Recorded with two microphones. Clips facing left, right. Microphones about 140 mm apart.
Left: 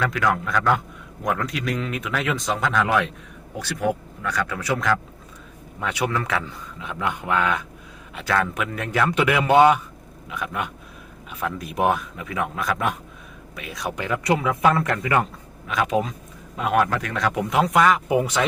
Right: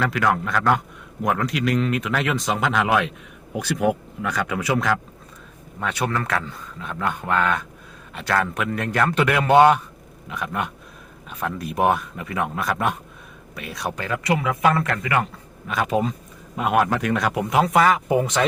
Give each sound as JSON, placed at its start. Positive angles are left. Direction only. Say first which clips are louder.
{"t": 0.0, "sound": "speech", "louder": "right 1 dB", "side_deg": -5}
{"t": 3.5, "sound": "speech", "louder": "right 3 dB", "side_deg": -15}
{"t": 5.8, "sound": "speech", "louder": "even", "side_deg": 10}
{"t": 13.9, "sound": "a man's voice", "louder": "left 2 dB", "side_deg": 20}
{"t": 15.6, "sound": "speech", "louder": "even", "side_deg": 0}